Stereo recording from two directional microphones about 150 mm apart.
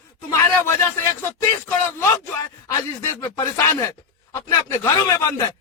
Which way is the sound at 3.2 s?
20° left (ahead or behind).